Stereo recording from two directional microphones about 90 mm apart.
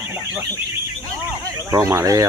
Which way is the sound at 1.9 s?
35° right (ahead or behind).